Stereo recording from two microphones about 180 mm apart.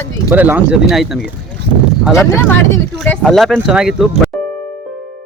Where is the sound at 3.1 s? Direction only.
Centre (ahead or behind).